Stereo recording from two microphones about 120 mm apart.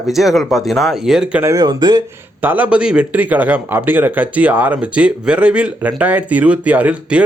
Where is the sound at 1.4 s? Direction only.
30° right (ahead or behind).